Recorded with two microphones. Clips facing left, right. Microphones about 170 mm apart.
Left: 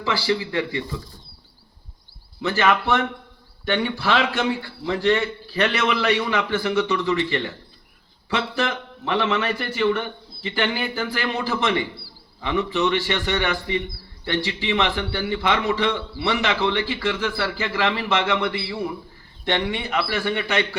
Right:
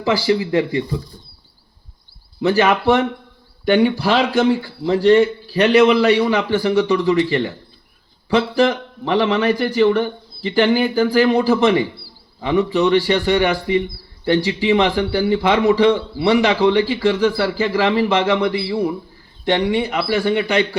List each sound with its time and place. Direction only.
0.0 s speech: 20° right (ahead or behind)
2.4 s a man's voice: 40° right (ahead or behind)